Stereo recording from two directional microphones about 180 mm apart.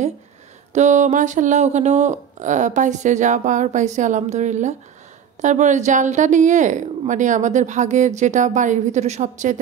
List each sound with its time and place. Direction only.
0.7 s speech: 40° right (ahead or behind)